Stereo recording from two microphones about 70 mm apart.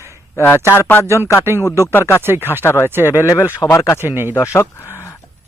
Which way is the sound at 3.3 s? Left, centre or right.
Left.